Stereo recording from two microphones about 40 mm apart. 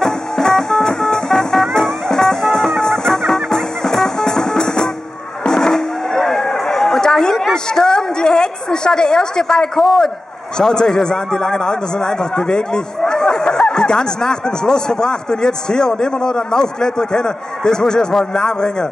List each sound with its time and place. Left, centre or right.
0.0 s music: centre
5.5 s a sound: centre
9.8 s a man's voice: centre